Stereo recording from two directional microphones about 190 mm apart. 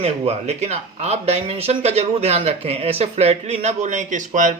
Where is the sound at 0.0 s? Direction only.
35° right (ahead or behind).